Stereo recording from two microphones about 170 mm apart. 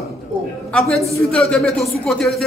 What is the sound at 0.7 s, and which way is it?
A man's voice, 5° left (ahead or behind).